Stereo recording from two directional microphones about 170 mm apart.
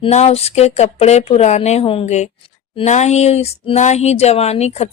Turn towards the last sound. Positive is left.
turn(degrees=40)  # may be behind; listen again after turning